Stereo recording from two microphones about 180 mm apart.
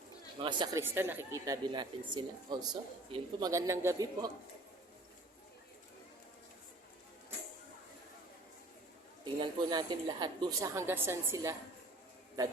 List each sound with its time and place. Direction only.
0.4 s a woman's voice: 25° right (ahead or behind)
0.8 s a woman's voice: 10° right (ahead or behind)
9.2 s a woman's voice: 25° right (ahead or behind)